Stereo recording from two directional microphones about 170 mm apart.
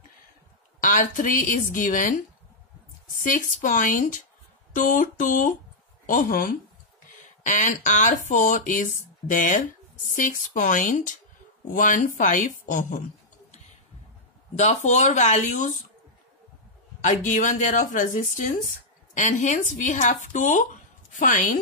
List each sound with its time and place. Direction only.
0.7 s speech: 50° left (ahead or behind)
14.6 s speech: 45° left (ahead or behind)
17.0 s speech: 50° left (ahead or behind)